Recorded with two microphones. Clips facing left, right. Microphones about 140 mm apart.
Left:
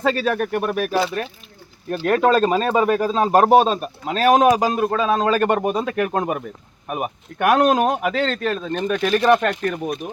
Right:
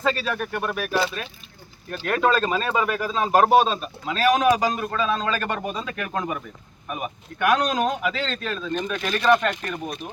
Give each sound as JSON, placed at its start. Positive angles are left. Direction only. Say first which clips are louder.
{"t": 0.0, "sound": "speech", "louder": "left 5 dB", "side_deg": 55}
{"t": 1.9, "sound": "speech", "louder": "left 5 dB", "side_deg": 40}
{"t": 3.5, "sound": "speech", "louder": "left 4 dB", "side_deg": 45}
{"t": 4.9, "sound": "speech", "louder": "left 6 dB", "side_deg": 55}